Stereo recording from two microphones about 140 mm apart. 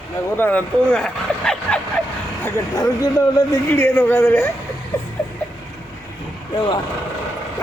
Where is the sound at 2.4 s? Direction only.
25° left (ahead or behind).